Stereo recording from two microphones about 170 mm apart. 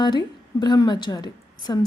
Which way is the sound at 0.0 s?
25° left (ahead or behind).